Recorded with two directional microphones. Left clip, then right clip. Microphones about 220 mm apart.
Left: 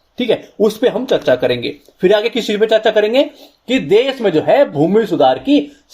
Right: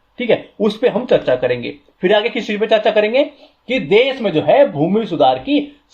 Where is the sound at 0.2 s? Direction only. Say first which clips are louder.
Left 1 dB; 45° left (ahead or behind).